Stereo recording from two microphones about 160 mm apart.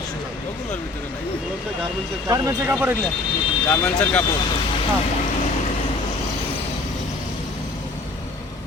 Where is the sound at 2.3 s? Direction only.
20° right (ahead or behind).